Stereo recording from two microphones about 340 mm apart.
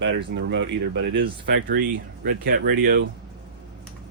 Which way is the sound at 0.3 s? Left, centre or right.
Right.